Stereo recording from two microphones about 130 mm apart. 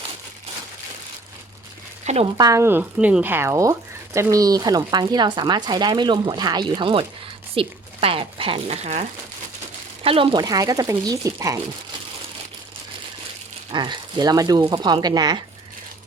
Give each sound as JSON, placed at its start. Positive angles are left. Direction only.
{"t": 2.1, "sound": "speech", "side_deg": -60}
{"t": 2.4, "sound": "speech", "side_deg": -25}
{"t": 10.0, "sound": "speech", "side_deg": -45}
{"t": 10.4, "sound": "speech", "side_deg": -25}
{"t": 13.7, "sound": "speech", "side_deg": -35}